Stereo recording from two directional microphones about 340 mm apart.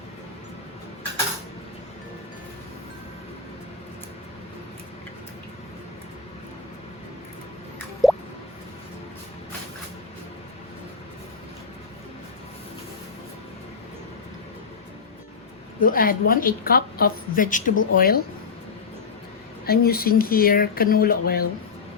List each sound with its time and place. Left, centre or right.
8.0 s drip: centre
15.8 s a woman's voice: left
19.6 s a woman's voice: left